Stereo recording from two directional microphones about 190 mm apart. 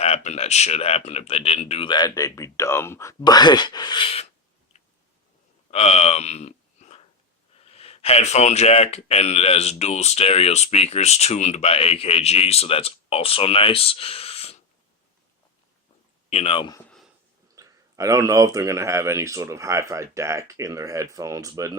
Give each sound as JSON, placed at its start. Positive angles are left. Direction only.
{"t": 0.0, "sound": "speech", "side_deg": 35}
{"t": 5.7, "sound": "speech", "side_deg": 30}
{"t": 16.3, "sound": "speech", "side_deg": 30}
{"t": 17.5, "sound": "speech", "side_deg": -15}